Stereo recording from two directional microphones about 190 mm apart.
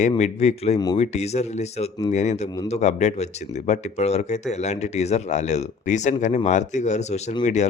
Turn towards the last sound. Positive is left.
turn(degrees=35)  # may be behind; listen again after turning